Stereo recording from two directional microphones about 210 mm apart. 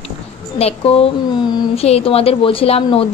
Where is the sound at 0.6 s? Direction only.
30° left (ahead or behind).